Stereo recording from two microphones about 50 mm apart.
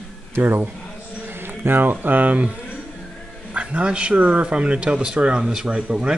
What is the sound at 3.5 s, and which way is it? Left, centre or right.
A man's voice, right.